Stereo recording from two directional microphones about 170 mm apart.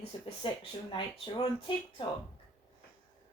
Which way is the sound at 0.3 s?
35° left (ahead or behind).